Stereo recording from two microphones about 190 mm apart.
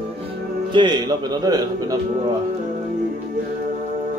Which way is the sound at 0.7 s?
25° right (ahead or behind).